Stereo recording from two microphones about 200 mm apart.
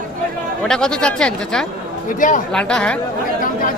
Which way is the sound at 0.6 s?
5° left (ahead or behind).